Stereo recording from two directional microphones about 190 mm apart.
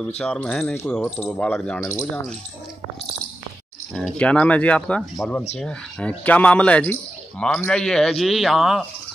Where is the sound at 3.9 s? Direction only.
5° left (ahead or behind).